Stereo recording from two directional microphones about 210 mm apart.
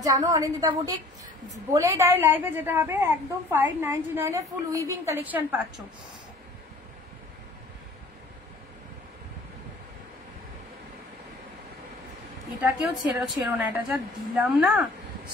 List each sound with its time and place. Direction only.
0.0 s a woman's voice: 15° right (ahead or behind)
12.6 s a woman's voice: 5° right (ahead or behind)